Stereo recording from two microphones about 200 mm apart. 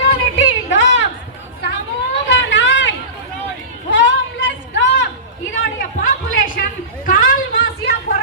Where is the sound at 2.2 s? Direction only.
65° left (ahead or behind).